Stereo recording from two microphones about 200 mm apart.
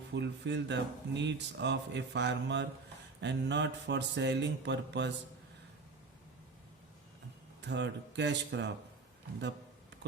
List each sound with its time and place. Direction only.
0.1 s speech: 60° right (ahead or behind)
7.6 s speech: 60° right (ahead or behind)